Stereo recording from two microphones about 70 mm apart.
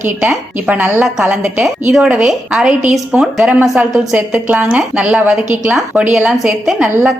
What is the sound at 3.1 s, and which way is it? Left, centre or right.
A woman's voice, right.